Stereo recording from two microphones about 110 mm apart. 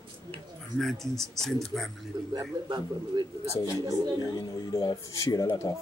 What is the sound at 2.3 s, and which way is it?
Speech, 40° right (ahead or behind).